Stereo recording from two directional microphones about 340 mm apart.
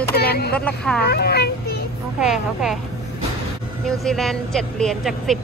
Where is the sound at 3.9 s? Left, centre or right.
Centre.